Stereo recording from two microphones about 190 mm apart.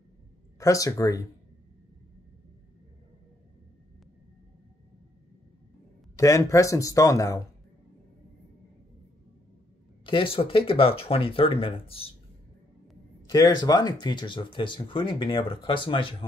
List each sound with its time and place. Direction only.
0.6 s speech: 15° left (ahead or behind)
6.1 s speech: 15° left (ahead or behind)
10.0 s speech: 30° left (ahead or behind)
13.3 s speech: 20° left (ahead or behind)